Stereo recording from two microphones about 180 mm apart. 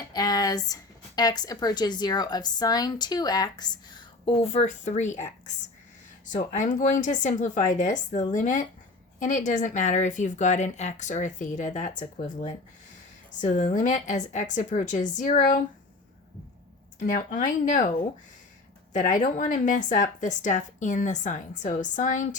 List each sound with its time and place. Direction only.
0.0 s speech: 20° left (ahead or behind); by 5.2 s 40° left (ahead or behind)
6.2 s speech: 45° left (ahead or behind)
17.0 s speech: 45° left (ahead or behind)
18.9 s speech: 45° left (ahead or behind)